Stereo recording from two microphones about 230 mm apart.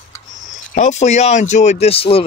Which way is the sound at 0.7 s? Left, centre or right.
Left.